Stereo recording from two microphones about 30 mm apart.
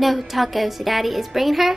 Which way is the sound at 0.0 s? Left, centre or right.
Centre.